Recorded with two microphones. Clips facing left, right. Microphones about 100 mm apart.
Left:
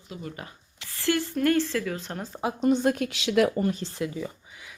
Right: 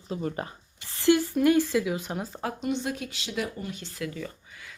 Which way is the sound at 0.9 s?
20° right (ahead or behind).